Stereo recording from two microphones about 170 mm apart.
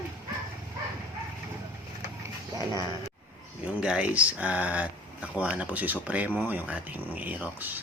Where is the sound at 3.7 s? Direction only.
5° right (ahead or behind).